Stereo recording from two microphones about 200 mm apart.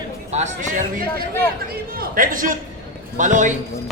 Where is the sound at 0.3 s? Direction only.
35° right (ahead or behind).